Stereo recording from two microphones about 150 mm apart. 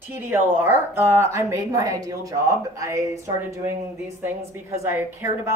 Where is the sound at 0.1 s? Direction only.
15° right (ahead or behind).